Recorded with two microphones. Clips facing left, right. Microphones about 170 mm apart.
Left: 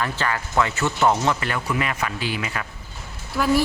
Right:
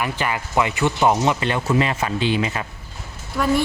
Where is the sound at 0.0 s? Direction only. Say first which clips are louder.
Right 1 dB; 15° right (ahead or behind).